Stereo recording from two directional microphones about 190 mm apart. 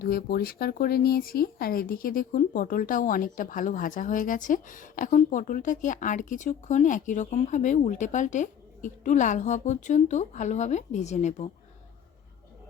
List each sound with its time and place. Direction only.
0.0 s speech: 55° left (ahead or behind); by 11.4 s 35° left (ahead or behind)